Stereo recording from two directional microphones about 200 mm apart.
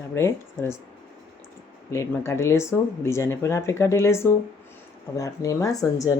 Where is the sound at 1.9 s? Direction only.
15° left (ahead or behind).